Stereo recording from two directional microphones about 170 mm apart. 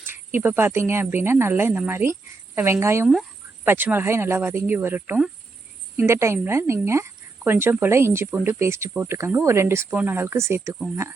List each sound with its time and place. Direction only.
0.0 s speech: 10° right (ahead or behind)